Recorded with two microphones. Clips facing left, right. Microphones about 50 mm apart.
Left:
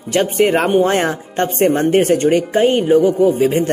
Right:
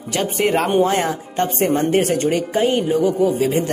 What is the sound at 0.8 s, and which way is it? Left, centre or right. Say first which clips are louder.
Speech: left 3 dB; left.